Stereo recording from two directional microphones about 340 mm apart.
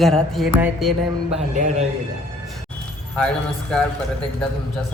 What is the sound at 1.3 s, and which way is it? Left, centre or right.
Speech, right.